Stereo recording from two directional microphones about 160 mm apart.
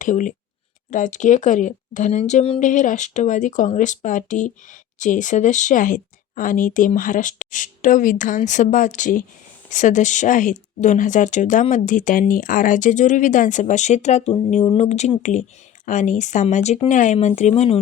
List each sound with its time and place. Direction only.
0.0 s speech: 55° left (ahead or behind)
2.6 s speech: 50° left (ahead or behind)